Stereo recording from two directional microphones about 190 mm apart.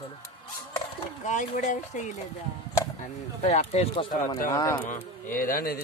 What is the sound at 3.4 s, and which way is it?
Speech, 35° left (ahead or behind).